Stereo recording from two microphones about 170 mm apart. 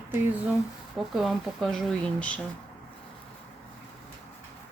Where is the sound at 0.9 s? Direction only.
Centre (ahead or behind).